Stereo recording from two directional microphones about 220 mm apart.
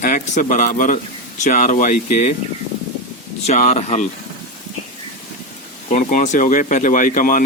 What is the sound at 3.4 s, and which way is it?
Speech, 30° left (ahead or behind).